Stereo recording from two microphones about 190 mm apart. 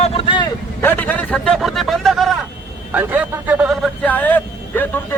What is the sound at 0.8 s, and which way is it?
A man's voice, 10° left (ahead or behind).